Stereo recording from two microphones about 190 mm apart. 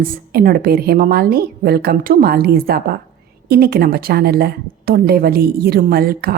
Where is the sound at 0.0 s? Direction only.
50° right (ahead or behind).